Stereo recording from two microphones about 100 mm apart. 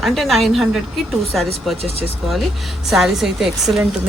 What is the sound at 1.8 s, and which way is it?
Speech, 80° right.